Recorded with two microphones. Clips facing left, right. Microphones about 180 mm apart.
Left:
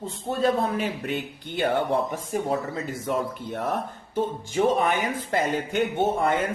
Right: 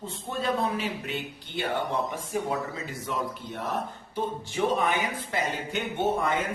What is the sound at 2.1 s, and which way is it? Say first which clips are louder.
Speech: left 3 dB; 40° left (ahead or behind).